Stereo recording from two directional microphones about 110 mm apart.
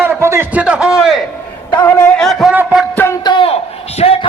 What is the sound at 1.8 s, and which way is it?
Speech, 25° left (ahead or behind).